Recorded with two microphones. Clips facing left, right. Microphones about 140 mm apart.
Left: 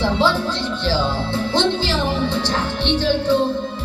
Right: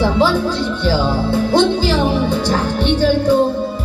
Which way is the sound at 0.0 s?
10° right (ahead or behind).